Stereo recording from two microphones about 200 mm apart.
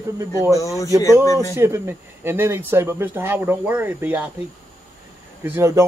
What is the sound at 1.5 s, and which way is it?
Speech, 10° right (ahead or behind).